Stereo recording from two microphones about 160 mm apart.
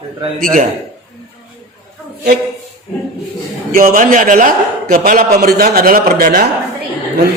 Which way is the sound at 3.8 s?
60° right (ahead or behind).